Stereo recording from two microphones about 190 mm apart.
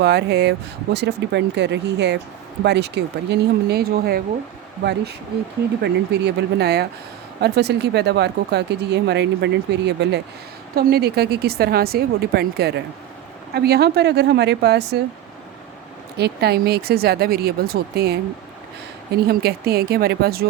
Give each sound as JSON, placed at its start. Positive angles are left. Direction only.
{"t": 0.0, "sound": "speech", "side_deg": -60}
{"t": 16.1, "sound": "speech", "side_deg": -60}
{"t": 19.3, "sound": "speech", "side_deg": -55}